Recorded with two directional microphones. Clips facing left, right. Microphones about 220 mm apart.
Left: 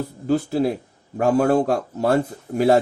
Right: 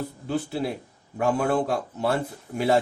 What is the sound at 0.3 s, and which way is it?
Speech, 40° left (ahead or behind).